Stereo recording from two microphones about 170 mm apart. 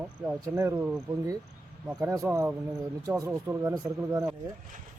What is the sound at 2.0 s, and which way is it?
Speech, 15° right (ahead or behind).